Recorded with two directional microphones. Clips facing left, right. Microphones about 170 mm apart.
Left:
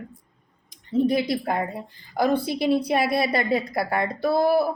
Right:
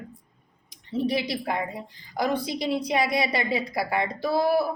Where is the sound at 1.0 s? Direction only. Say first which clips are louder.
Left 4 dB; 50° left (ahead or behind).